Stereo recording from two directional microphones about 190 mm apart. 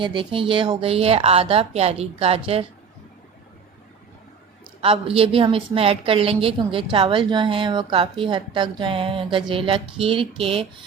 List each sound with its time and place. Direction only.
0.0 s a woman's voice: 25° right (ahead or behind)
4.8 s a woman's voice: 30° right (ahead or behind)